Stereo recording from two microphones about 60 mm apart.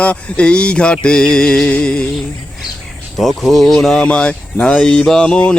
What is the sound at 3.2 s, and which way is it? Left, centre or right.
Speech, centre.